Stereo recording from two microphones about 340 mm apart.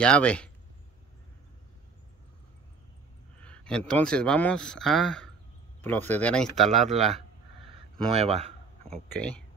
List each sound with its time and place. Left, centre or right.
0.0 s speech: centre
3.4 s speech: centre
8.1 s speech: centre
8.9 s speech: centre